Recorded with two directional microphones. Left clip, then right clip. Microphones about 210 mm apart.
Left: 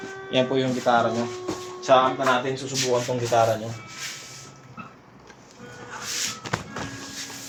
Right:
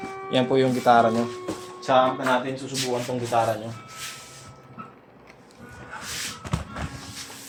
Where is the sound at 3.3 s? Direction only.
10° left (ahead or behind).